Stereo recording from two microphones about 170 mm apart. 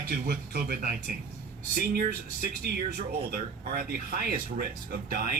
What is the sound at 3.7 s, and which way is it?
A man's voice, 60° right (ahead or behind).